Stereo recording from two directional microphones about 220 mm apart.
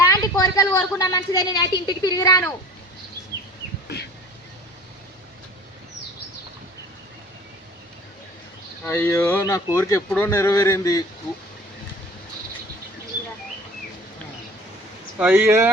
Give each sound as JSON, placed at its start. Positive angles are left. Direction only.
{"t": 0.1, "sound": "a woman's voice", "side_deg": 15}
{"t": 8.8, "sound": "speech", "side_deg": 10}
{"t": 15.2, "sound": "speech", "side_deg": -5}